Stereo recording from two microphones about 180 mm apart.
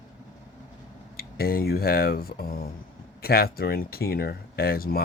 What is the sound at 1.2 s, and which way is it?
Speech, 55° left (ahead or behind).